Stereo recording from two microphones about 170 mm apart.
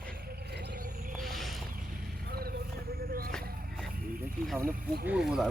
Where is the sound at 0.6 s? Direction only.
65° right (ahead or behind).